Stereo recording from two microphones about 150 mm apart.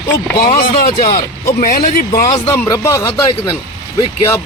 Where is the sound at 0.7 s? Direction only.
80° left.